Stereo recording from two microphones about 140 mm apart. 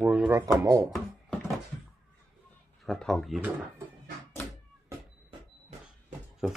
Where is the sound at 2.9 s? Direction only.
Centre (ahead or behind).